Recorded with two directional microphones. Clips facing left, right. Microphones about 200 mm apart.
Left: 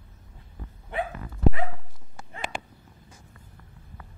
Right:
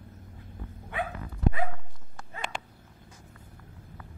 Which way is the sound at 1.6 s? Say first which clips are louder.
Even; 5° left (ahead or behind).